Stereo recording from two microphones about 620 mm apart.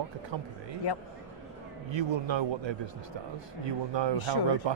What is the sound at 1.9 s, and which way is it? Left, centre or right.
A man's voice, right.